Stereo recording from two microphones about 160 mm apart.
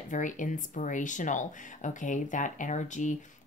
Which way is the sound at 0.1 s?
50° left (ahead or behind).